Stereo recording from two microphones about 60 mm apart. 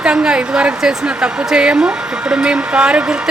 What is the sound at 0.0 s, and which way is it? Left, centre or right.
A woman's voice, centre.